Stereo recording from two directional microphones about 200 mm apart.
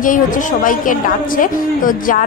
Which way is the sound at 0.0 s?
40° left (ahead or behind).